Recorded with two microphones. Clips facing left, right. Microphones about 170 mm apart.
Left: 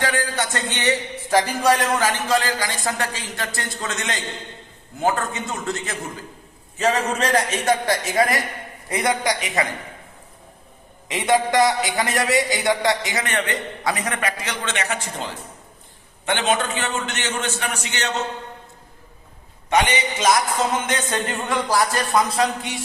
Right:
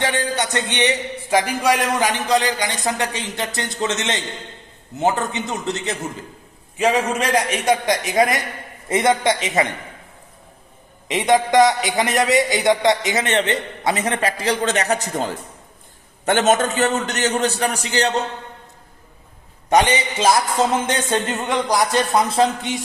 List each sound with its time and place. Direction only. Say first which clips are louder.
0.0 s a man's voice: right 2 dB; 25° right (ahead or behind)
11.1 s a man's voice: right 3 dB; 20° right (ahead or behind)
19.7 s a man's voice: right 3 dB; 35° right (ahead or behind)